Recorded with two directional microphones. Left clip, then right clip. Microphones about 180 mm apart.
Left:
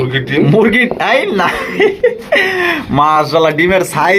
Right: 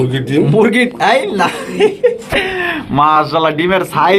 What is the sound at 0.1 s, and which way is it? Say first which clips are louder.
Speech: left 1 dB; 60° right (ahead or behind).